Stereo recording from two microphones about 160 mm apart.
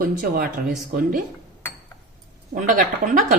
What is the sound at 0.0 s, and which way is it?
Speech, 65° right (ahead or behind).